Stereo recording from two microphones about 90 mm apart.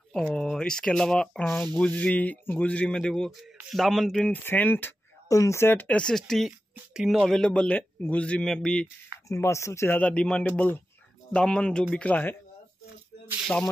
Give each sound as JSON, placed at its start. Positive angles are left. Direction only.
{"t": 0.1, "sound": "speech", "side_deg": 5}
{"t": 4.3, "sound": "speech", "side_deg": 20}
{"t": 5.3, "sound": "speech", "side_deg": 35}
{"t": 7.2, "sound": "speech", "side_deg": 5}
{"t": 9.3, "sound": "speech", "side_deg": 30}
{"t": 9.9, "sound": "speech", "side_deg": 15}